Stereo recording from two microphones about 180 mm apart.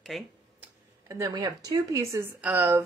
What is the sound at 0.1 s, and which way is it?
Speech, centre (ahead or behind).